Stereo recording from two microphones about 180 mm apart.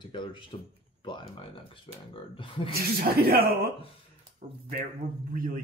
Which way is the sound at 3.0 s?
60° right (ahead or behind).